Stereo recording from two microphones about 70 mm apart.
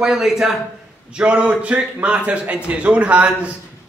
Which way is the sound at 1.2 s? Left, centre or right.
Centre.